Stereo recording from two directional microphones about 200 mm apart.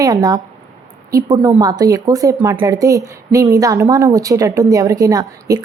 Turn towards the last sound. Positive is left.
turn(degrees=-15)  # may be behind; listen again after turning